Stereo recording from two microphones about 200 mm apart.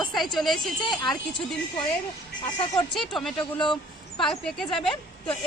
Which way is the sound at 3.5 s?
25° left (ahead or behind).